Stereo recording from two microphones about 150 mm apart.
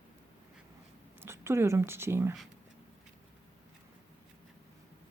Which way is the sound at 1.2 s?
15° right (ahead or behind).